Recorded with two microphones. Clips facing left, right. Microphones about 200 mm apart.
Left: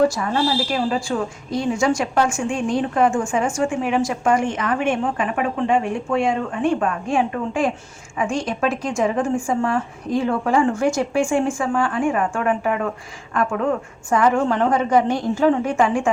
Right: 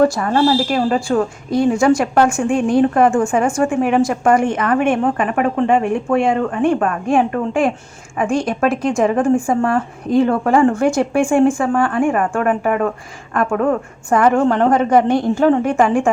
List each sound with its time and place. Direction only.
0.0 s a woman's voice: 55° right (ahead or behind)